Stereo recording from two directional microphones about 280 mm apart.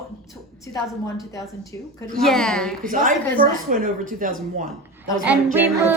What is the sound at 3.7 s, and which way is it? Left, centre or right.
Speech, right.